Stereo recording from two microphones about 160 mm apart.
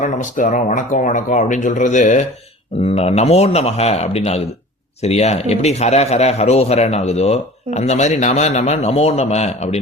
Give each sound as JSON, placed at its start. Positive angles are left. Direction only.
{"t": 0.0, "sound": "speech", "side_deg": 50}
{"t": 2.8, "sound": "a man's voice", "side_deg": 40}